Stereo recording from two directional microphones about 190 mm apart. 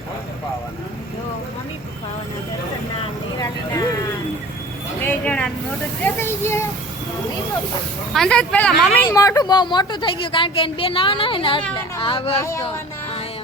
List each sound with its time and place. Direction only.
3.3 s vehicle: 20° left (ahead or behind)
4.9 s a sound: 10° left (ahead or behind)
6.0 s speech: 10° left (ahead or behind)
8.1 s speech: 5° left (ahead or behind)
9.0 s speech: 15° left (ahead or behind)
12.4 s speech: 15° left (ahead or behind)